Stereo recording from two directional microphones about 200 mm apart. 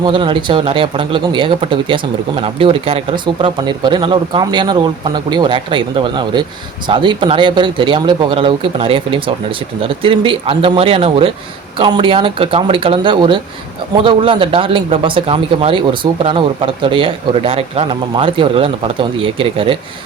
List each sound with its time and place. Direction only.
0.0 s a man's voice: 25° right (ahead or behind)